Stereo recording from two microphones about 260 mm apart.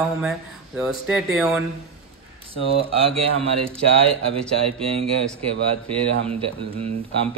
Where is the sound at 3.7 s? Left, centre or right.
Right.